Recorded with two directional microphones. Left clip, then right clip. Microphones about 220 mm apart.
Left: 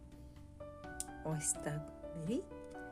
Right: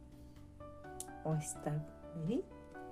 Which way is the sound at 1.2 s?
20° left (ahead or behind).